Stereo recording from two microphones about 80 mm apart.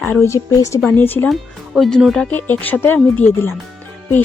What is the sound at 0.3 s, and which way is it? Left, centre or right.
Speech, left.